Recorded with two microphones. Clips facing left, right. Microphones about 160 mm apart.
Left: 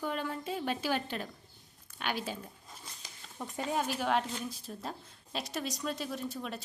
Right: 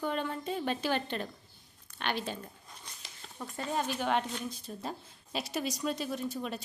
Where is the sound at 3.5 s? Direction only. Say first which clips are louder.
Even; 5° left (ahead or behind).